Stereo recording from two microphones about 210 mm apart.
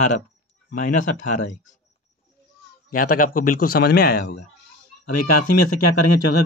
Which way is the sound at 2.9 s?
45° left (ahead or behind).